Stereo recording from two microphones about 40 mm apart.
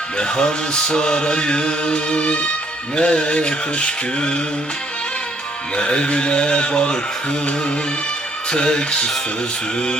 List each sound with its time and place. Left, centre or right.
0.2 s chant: centre
5.7 s chant: left